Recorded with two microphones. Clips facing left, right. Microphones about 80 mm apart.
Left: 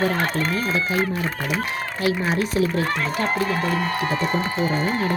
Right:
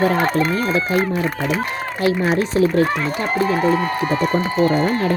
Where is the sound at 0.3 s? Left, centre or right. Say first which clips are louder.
Right 5 dB; right.